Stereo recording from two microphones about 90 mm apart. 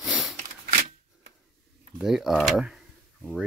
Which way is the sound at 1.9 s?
5° right (ahead or behind).